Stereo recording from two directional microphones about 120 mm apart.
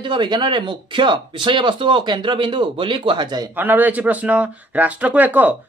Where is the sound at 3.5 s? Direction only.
15° right (ahead or behind).